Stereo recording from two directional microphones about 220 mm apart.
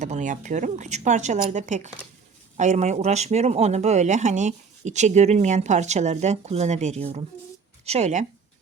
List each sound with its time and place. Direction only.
0.0 s speech: 35° right (ahead or behind)